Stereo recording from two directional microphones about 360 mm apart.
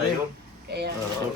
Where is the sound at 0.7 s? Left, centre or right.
Right.